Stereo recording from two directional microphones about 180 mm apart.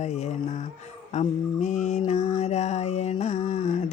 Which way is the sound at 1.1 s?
40° left (ahead or behind).